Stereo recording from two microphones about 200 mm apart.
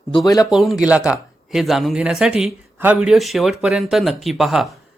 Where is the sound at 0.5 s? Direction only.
Centre (ahead or behind).